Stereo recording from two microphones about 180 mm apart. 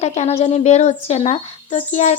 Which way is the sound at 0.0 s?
40° left (ahead or behind).